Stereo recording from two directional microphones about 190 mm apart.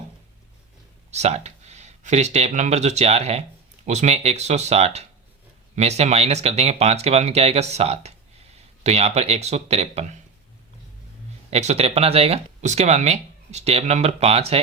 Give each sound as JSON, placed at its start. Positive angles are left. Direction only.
{"t": 1.1, "sound": "speech", "side_deg": -35}
{"t": 11.5, "sound": "speech", "side_deg": -35}